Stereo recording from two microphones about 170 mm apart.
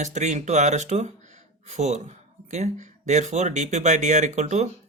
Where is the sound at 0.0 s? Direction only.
45° right (ahead or behind).